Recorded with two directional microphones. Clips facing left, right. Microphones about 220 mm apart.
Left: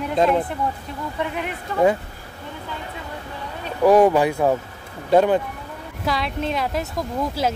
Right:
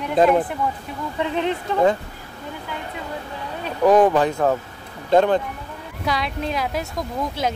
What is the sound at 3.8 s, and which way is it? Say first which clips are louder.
A woman's voice: left 1 dB; 10° left (ahead or behind).